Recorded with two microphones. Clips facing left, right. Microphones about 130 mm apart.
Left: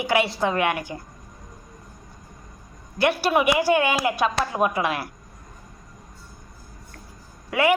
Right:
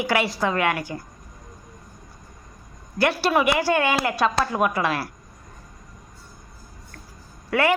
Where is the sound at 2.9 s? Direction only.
20° left (ahead or behind).